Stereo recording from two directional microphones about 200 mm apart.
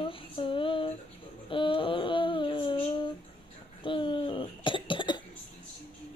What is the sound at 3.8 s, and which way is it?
Cough, 25° left (ahead or behind).